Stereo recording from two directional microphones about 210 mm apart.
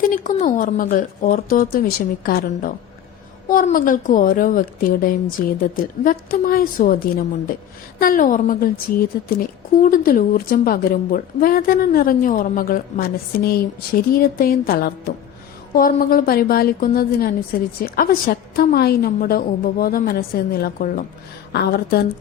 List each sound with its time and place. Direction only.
0.0 s a woman's voice: 40° left (ahead or behind)